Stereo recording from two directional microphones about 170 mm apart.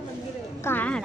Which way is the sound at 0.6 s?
10° left (ahead or behind).